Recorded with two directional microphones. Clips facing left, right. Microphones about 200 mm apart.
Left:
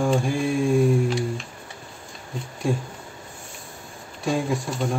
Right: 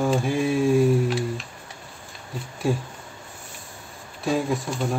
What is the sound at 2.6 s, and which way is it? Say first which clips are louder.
Speech: right 1 dB; 5° right (ahead or behind).